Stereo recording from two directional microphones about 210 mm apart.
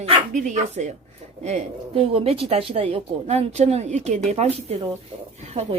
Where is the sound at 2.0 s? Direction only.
25° right (ahead or behind).